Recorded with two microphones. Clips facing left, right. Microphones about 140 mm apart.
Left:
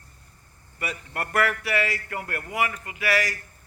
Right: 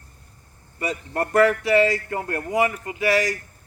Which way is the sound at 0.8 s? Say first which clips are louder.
Right 7 dB; 25° right (ahead or behind).